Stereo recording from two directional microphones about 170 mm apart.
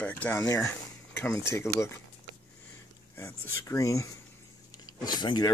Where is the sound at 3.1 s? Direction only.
15° left (ahead or behind).